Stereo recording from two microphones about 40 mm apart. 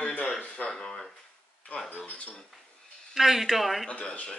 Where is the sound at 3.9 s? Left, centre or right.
Left.